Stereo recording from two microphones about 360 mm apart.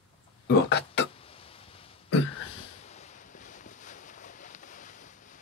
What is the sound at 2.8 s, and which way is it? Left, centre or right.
Boat, centre.